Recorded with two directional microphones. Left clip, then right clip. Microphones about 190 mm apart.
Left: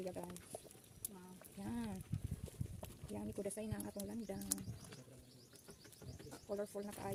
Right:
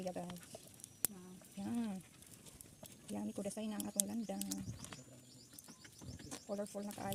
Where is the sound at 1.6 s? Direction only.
15° right (ahead or behind).